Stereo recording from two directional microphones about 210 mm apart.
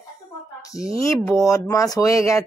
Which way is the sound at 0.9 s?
15° left (ahead or behind).